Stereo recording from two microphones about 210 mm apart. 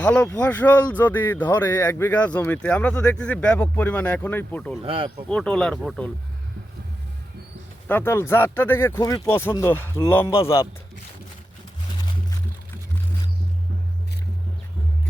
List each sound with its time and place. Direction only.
0.0 s speech: 5° left (ahead or behind)
4.8 s speech: 25° right (ahead or behind)
5.3 s speech: 5° left (ahead or behind)
7.9 s speech: 10° left (ahead or behind)